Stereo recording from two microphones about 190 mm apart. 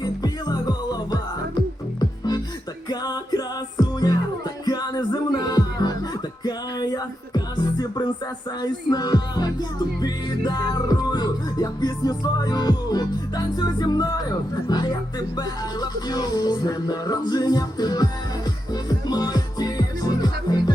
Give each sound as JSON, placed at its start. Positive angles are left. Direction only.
{"t": 0.0, "sound": "music", "side_deg": 20}